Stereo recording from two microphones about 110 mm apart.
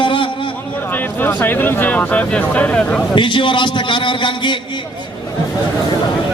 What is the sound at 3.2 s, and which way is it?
A man's voice, 50° left (ahead or behind).